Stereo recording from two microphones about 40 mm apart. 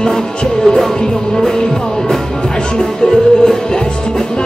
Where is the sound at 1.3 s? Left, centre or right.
Centre.